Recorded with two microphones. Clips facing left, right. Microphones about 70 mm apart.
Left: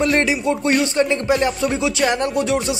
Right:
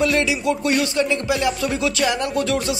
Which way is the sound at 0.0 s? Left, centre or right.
Left.